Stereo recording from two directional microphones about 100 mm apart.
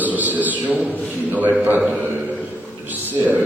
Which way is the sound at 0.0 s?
15° right (ahead or behind).